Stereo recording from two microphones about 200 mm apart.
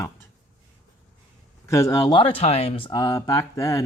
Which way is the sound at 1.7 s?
15° left (ahead or behind).